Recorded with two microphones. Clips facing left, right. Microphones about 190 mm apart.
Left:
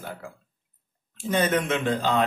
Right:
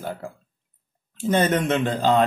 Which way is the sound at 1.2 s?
40° right (ahead or behind).